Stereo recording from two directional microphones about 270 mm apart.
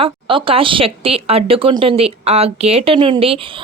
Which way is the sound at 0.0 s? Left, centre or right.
Centre.